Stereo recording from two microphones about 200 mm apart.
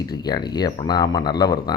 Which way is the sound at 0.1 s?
20° left (ahead or behind).